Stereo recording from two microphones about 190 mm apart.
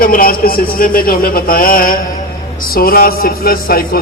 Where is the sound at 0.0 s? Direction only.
50° left (ahead or behind).